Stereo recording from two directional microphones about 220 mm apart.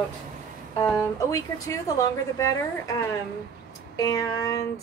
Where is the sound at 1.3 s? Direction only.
15° left (ahead or behind).